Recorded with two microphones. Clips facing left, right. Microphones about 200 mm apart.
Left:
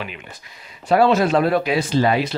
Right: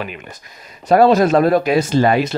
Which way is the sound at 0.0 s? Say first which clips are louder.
Right 4 dB; 45° right (ahead or behind).